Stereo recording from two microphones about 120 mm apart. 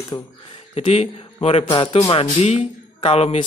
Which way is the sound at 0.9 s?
55° left (ahead or behind).